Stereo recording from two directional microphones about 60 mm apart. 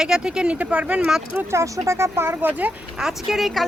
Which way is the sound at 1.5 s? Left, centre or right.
Right.